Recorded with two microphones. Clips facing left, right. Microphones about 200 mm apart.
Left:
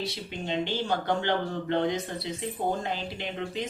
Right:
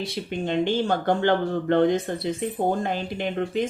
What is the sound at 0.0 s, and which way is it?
Speech, 55° right (ahead or behind).